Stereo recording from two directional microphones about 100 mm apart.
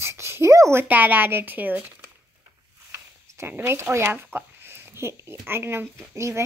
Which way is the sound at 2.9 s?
25° right (ahead or behind).